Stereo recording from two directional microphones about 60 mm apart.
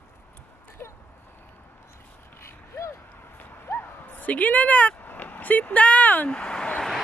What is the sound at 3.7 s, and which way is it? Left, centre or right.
Bow-wow, left.